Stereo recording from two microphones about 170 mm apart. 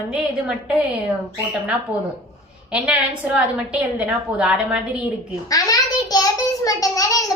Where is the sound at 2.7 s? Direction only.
5° right (ahead or behind).